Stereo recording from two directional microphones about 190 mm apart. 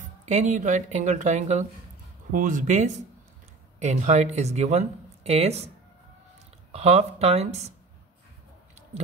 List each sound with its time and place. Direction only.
0.0 s speech: 40° right (ahead or behind)
6.7 s speech: 35° right (ahead or behind)